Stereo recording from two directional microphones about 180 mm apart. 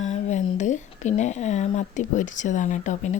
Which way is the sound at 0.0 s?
40° left (ahead or behind).